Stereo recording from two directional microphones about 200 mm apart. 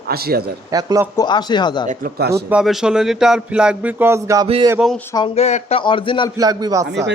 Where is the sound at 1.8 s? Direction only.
50° right (ahead or behind).